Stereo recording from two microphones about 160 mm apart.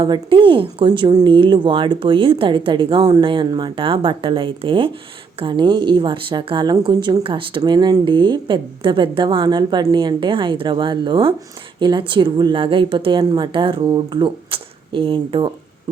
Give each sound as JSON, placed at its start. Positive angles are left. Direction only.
{"t": 0.0, "sound": "a woman's voice", "side_deg": -30}